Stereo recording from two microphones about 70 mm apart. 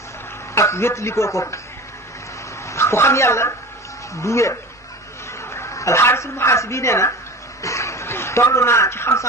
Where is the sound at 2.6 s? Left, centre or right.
Left.